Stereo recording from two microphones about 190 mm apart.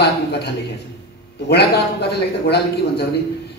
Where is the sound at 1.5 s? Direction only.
60° left (ahead or behind).